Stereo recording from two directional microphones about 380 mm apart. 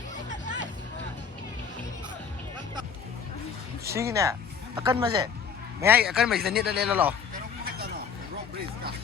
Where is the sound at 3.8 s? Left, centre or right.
Centre.